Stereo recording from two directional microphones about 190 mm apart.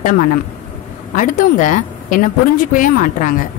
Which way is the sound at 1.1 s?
45° left (ahead or behind).